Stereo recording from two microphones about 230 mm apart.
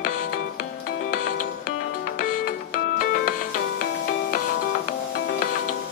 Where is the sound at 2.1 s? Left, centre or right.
Left.